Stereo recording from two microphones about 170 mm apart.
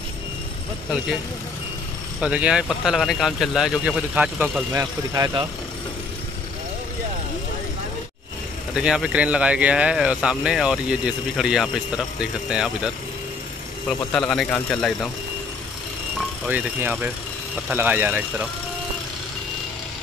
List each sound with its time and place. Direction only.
2.1 s speech: 5° right (ahead or behind)
5.1 s speech: 25° right (ahead or behind)
8.7 s speech: 5° right (ahead or behind)
16.2 s speech: 10° right (ahead or behind)